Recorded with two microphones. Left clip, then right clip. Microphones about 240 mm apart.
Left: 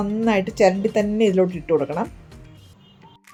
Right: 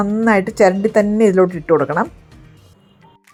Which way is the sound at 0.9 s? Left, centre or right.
Right.